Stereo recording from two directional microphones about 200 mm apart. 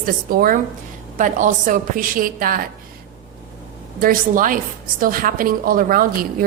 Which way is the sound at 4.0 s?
45° right (ahead or behind).